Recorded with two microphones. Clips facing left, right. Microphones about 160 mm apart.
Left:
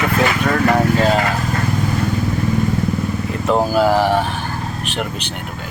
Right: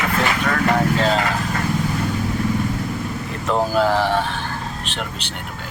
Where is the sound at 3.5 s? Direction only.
10° left (ahead or behind).